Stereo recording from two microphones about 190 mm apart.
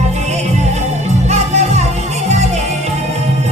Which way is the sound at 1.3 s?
35° right (ahead or behind).